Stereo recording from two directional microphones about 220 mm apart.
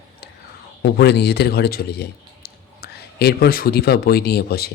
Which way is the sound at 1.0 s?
50° left (ahead or behind).